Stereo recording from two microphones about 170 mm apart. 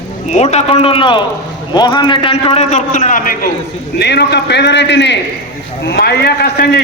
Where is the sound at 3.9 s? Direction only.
75° left (ahead or behind).